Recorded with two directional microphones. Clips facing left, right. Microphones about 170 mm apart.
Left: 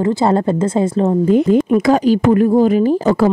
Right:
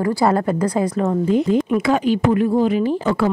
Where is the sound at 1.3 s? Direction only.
55° left (ahead or behind).